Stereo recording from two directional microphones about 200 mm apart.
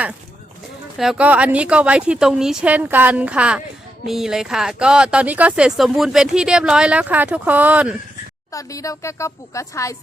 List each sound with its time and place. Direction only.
0.9 s speech: 5° right (ahead or behind)
8.5 s speech: 15° left (ahead or behind)